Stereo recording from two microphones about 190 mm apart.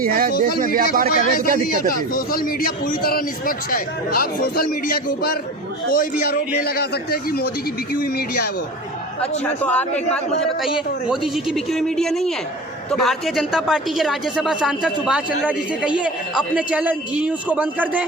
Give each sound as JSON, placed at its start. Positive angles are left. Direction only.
{"t": 0.0, "sound": "speech", "side_deg": -50}
{"t": 1.6, "sound": "a man's voice", "side_deg": 50}
{"t": 9.4, "sound": "a man's voice", "side_deg": 5}
{"t": 11.4, "sound": "a man's voice", "side_deg": 0}